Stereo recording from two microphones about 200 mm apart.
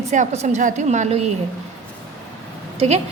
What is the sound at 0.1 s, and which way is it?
A woman's voice, 40° right (ahead or behind).